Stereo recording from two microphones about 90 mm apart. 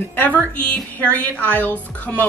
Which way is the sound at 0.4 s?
15° left (ahead or behind).